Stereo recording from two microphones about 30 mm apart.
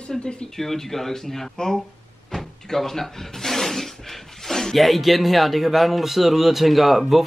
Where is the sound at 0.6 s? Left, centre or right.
Centre.